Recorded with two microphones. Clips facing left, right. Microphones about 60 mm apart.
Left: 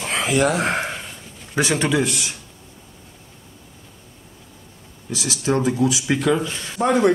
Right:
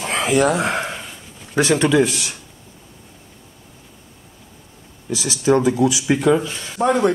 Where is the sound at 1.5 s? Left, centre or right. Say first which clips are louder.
Right 4 dB; centre.